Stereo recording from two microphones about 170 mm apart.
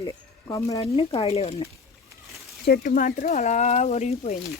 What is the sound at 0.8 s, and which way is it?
Speech, 35° left (ahead or behind).